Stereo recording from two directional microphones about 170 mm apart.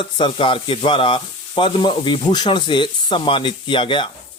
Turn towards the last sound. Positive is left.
turn(degrees=30)  # may be behind; listen again after turning